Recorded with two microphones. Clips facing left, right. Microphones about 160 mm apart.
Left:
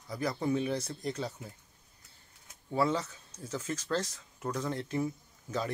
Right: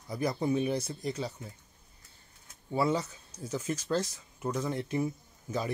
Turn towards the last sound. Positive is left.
turn(degrees=-15)  # may be behind; listen again after turning